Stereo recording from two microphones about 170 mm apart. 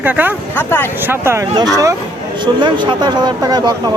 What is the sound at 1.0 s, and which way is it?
Speech, 15° right (ahead or behind).